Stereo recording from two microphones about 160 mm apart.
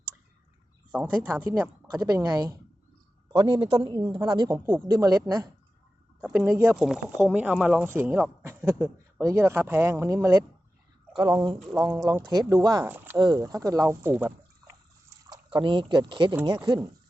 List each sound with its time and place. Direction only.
0.9 s a woman's voice: 10° right (ahead or behind)
6.7 s a woman's voice: centre (ahead or behind); by 11.6 s 25° right (ahead or behind)
11.6 s speech: centre (ahead or behind)
11.9 s a woman's voice: 20° right (ahead or behind)
15.3 s a woman's voice: 30° right (ahead or behind)